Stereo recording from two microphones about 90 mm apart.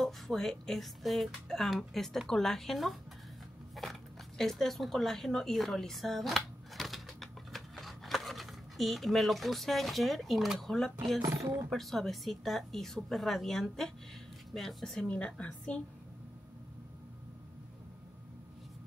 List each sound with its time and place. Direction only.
0.0 s a woman's voice: centre (ahead or behind)
11.2 s speech: 35° right (ahead or behind)
11.7 s a woman's voice: centre (ahead or behind)